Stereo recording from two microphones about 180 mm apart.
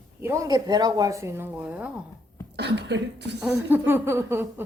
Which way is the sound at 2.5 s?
70° right (ahead or behind).